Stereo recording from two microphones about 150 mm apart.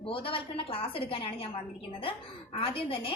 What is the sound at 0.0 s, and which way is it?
A woman's voice, 35° left (ahead or behind).